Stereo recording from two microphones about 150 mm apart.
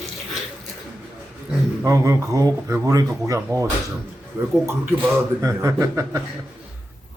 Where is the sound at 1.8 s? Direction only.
20° right (ahead or behind).